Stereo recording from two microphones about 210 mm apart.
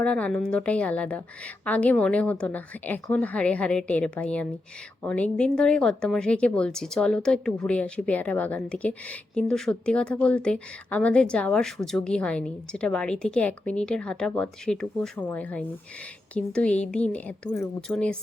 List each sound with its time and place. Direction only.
0.0 s a woman's voice: 5° left (ahead or behind)